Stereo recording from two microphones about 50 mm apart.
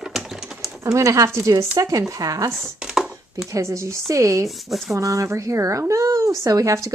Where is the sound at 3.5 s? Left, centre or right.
Right.